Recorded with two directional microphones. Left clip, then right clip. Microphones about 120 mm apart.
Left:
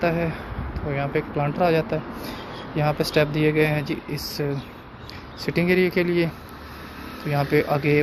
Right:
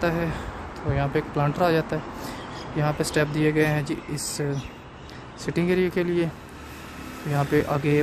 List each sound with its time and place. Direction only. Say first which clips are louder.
0.0 s speech: left 2 dB; 25° right (ahead or behind)
7.3 s speech: left 2 dB; 15° right (ahead or behind)